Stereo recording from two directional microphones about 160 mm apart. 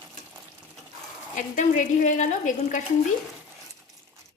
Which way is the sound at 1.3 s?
50° left (ahead or behind).